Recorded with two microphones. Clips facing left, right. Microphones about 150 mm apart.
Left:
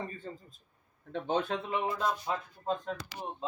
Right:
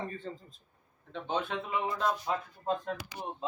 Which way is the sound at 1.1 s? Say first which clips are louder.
Left 3 dB; 45° left (ahead or behind).